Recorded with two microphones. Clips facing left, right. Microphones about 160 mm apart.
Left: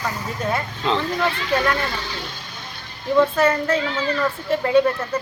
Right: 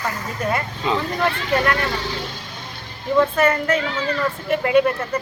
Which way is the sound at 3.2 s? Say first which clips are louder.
Even; centre (ahead or behind).